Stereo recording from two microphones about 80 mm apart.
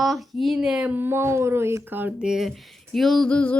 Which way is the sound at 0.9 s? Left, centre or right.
Right.